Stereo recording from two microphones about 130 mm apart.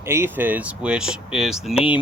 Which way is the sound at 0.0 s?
20° right (ahead or behind).